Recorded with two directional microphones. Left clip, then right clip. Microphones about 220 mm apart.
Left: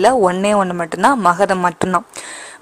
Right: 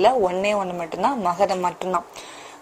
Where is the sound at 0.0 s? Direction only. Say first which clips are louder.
Left 5 dB; 30° left (ahead or behind).